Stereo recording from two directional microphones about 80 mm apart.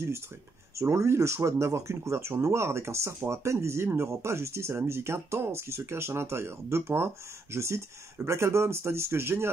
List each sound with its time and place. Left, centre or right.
0.7 s speech: right